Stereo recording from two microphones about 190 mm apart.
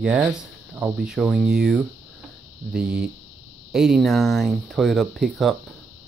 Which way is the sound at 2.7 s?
55° right (ahead or behind).